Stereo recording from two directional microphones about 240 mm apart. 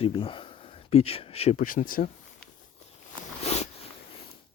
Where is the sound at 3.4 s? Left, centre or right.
Left.